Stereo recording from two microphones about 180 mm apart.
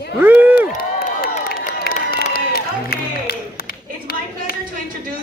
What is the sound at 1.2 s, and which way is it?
Music, 55° left (ahead or behind).